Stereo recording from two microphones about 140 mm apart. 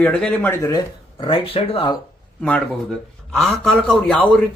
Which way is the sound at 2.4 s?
10° left (ahead or behind).